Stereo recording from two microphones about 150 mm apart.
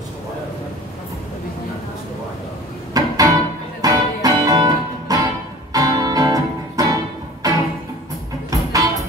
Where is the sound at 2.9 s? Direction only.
25° right (ahead or behind).